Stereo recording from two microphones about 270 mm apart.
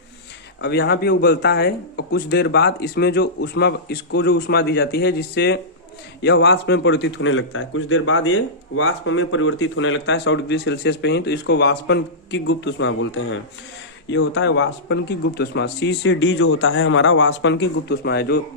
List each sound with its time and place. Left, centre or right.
0.6 s a man's voice: left